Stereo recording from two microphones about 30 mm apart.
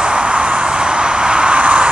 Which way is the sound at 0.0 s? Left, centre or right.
Right.